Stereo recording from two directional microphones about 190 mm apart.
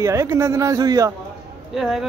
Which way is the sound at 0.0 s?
15° right (ahead or behind).